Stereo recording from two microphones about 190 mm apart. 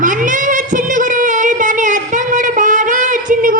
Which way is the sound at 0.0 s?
45° right (ahead or behind).